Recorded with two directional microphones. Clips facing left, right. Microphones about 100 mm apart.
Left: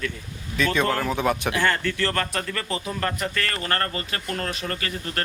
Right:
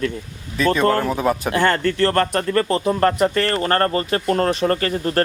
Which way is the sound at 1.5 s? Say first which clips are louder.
Right 6 dB; 45° right (ahead or behind).